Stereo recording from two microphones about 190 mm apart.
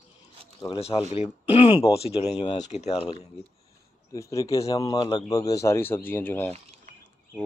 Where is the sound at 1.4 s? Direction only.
30° left (ahead or behind).